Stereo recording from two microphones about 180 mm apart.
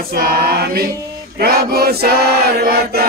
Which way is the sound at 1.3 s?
60° right (ahead or behind).